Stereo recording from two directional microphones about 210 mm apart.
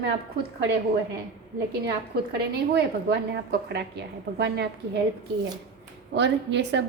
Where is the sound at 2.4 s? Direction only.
50° right (ahead or behind).